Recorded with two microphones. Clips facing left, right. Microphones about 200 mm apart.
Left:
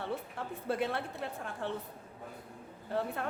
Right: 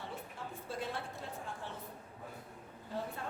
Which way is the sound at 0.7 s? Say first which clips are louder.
Left 8 dB; 65° left (ahead or behind).